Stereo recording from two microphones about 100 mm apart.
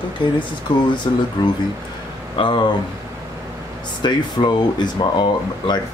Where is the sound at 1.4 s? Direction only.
40° left (ahead or behind).